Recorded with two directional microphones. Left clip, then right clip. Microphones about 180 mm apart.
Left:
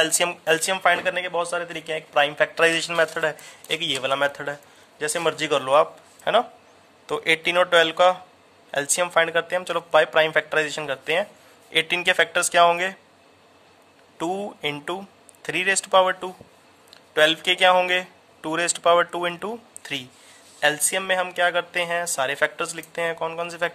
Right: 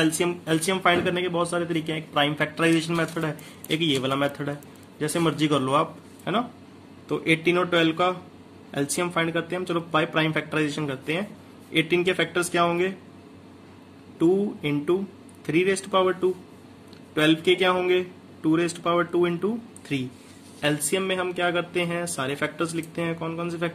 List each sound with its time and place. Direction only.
0.0 s speech: 50° left (ahead or behind)
14.1 s speech: 50° left (ahead or behind)